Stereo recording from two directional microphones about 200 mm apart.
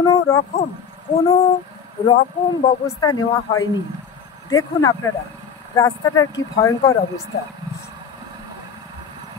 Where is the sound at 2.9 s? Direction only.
15° left (ahead or behind).